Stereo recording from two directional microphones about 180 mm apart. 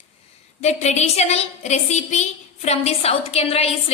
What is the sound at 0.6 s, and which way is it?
A woman's voice, 40° left (ahead or behind).